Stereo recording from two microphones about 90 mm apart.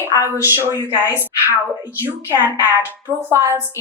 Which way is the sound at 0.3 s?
30° right (ahead or behind).